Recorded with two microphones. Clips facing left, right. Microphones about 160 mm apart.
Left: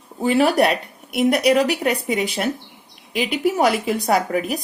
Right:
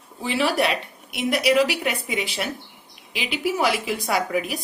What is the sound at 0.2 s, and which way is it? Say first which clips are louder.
A woman's voice: left 6 dB; 50° left (ahead or behind).